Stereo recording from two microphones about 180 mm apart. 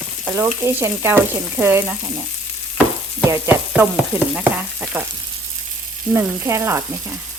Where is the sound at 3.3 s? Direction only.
10° right (ahead or behind).